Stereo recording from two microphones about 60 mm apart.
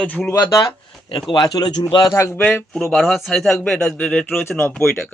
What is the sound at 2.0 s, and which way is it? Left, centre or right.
Speech, left.